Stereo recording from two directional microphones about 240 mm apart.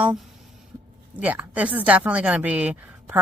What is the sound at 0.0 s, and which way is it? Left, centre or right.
A woman's voice, centre.